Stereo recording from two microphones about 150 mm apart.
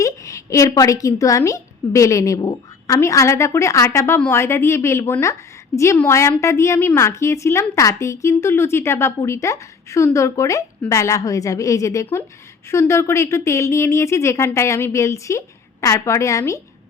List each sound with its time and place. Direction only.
0.0 s a woman's voice: 20° left (ahead or behind)